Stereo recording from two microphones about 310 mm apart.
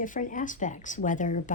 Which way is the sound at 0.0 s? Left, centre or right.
Left.